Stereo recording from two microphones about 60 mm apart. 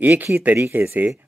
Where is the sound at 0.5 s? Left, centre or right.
Right.